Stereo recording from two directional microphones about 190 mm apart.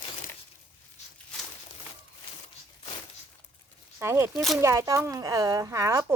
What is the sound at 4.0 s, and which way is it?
Speech, 15° right (ahead or behind).